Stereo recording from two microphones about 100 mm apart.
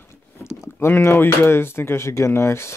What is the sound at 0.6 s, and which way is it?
Speech, 25° left (ahead or behind).